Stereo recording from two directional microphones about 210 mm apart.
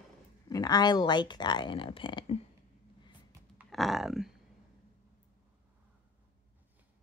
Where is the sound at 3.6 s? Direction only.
Centre (ahead or behind).